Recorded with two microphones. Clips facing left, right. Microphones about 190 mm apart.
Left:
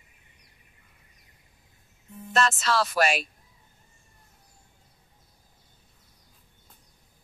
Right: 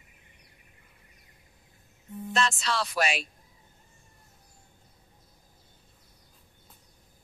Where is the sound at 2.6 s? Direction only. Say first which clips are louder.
Left 4 dB; 50° left (ahead or behind).